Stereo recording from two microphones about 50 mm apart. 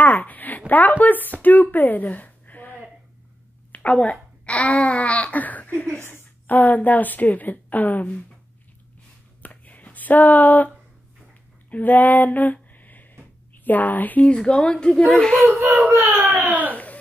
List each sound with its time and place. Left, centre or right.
0.0 s a sound: left
1.4 s speech: left
3.7 s speech: left
5.9 s a woman's voice: left
6.4 s speech: left
9.4 s a sound: left
11.7 s a sound: left
13.7 s speech: left
14.3 s speech: centre
15.4 s speech: right
16.0 s speech: right
16.7 s a sound: left